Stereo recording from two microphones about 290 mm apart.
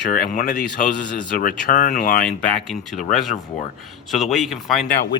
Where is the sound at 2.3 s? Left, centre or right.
Centre.